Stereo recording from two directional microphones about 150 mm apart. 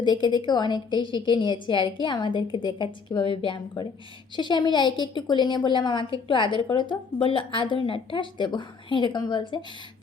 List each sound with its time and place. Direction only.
0.0 s a woman's voice: 30° left (ahead or behind)